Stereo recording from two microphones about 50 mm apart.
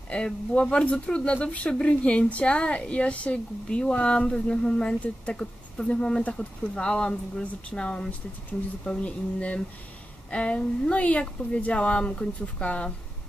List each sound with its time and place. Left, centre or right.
0.1 s speech: left